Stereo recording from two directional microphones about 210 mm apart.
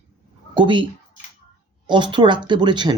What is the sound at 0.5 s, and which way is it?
Speech, 25° right (ahead or behind).